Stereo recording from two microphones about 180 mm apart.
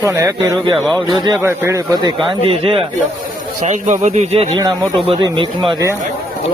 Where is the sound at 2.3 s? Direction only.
30° right (ahead or behind).